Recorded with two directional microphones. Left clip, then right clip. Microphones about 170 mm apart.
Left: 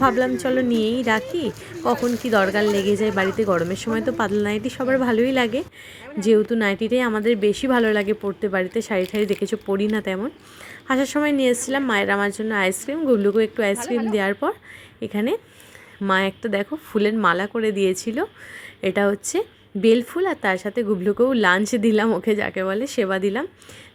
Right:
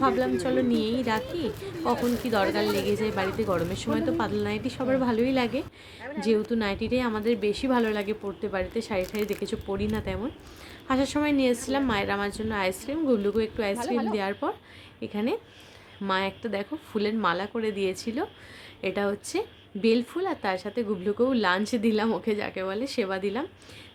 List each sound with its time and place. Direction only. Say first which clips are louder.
0.0 s speech: left 6 dB; 35° left (ahead or behind)
13.7 s a woman's voice: left 4 dB; 5° right (ahead or behind)
14.1 s speech: left 7 dB; 35° left (ahead or behind)